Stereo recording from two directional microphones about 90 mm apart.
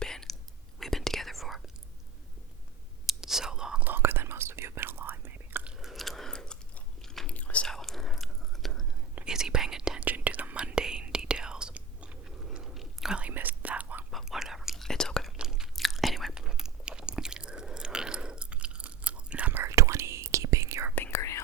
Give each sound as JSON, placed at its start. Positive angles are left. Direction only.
{"t": 0.0, "sound": "whispering", "side_deg": 5}
{"t": 3.1, "sound": "whispering", "side_deg": -5}
{"t": 3.8, "sound": "whispering", "side_deg": -25}
{"t": 5.6, "sound": "biting", "side_deg": -5}
{"t": 7.0, "sound": "chewing", "side_deg": 5}
{"t": 7.3, "sound": "chewing", "side_deg": 15}
{"t": 9.1, "sound": "whispering", "side_deg": -10}
{"t": 14.1, "sound": "whispering", "side_deg": 0}
{"t": 15.4, "sound": "chewing", "side_deg": -5}
{"t": 19.6, "sound": "whispering", "side_deg": -35}
{"t": 20.9, "sound": "whispering", "side_deg": 30}